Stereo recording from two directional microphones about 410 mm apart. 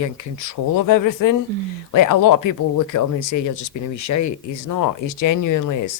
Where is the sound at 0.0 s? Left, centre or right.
Left.